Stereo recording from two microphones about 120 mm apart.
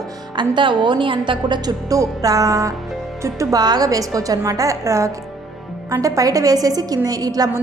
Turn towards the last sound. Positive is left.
turn(degrees=-30)  # may be behind; listen again after turning